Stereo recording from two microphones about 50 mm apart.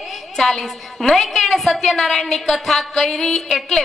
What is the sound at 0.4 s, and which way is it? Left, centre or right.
A woman's voice, centre.